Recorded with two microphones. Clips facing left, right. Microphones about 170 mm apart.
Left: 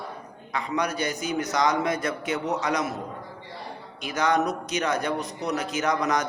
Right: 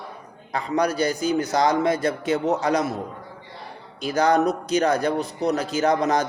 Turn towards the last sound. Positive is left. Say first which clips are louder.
# right 4 dB
turn(degrees=-30)  # may be behind; listen again after turning